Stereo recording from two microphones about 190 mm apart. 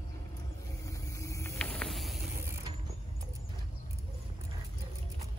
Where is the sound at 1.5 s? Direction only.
5° left (ahead or behind).